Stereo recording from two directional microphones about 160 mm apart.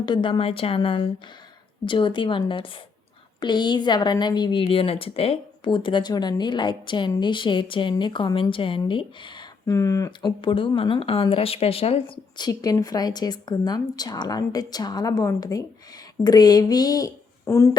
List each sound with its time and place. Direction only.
0.0 s a woman's voice: 30° left (ahead or behind)